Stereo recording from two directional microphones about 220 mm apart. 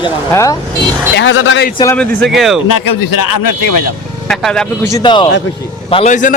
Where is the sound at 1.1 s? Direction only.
55° left (ahead or behind).